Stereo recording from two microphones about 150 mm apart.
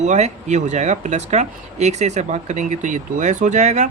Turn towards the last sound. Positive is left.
turn(degrees=-50)  # may be behind; listen again after turning